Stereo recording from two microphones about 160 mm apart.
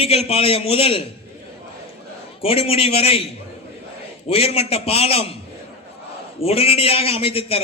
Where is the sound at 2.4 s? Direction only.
35° left (ahead or behind).